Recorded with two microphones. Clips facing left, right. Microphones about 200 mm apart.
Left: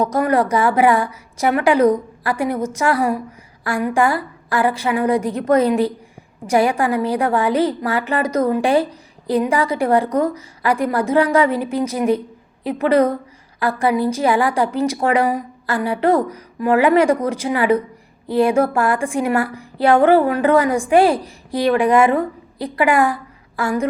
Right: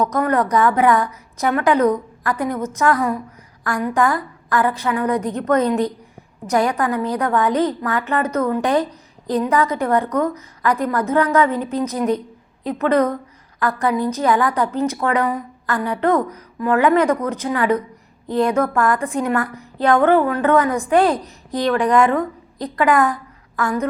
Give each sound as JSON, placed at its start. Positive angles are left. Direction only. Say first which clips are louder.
{"t": 0.2, "sound": "a woman's voice", "louder": "left 1 dB", "side_deg": 10}